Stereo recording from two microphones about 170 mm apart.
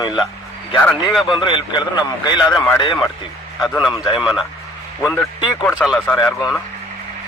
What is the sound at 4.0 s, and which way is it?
Speech, 30° left (ahead or behind).